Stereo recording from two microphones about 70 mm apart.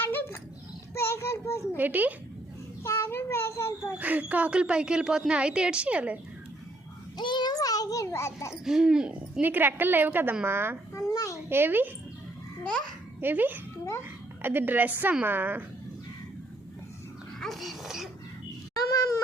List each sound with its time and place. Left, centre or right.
0.0 s dog: left
0.9 s child singing: left
1.7 s a woman's voice: right
2.8 s cat: left
3.9 s speech: right
7.2 s child singing: left
7.5 s a sound: left
8.6 s speech: centre
9.4 s a woman's voice: right
10.9 s a child's voice: left
11.3 s a child's voice: right
13.1 s a woman's voice: right
17.4 s speech: centre